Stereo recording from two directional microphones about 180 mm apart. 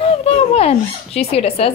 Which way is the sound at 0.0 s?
35° left (ahead or behind).